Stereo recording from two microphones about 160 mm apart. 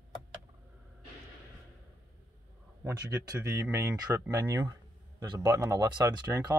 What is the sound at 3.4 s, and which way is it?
Speech, 15° right (ahead or behind).